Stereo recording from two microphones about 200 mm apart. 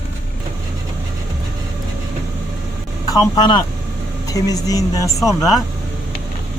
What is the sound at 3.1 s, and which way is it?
Speech, 20° left (ahead or behind).